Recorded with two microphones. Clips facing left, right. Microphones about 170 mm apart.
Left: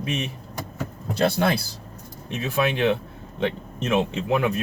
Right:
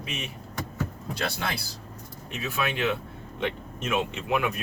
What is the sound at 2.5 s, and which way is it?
Speech, 30° left (ahead or behind).